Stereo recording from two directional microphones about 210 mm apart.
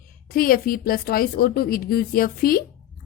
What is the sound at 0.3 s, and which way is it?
A woman's voice, 45° left (ahead or behind).